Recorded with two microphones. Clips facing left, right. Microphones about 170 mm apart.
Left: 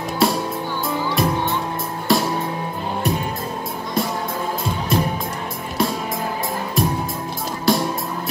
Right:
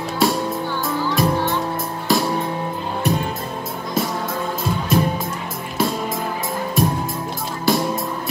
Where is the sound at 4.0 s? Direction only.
Centre (ahead or behind).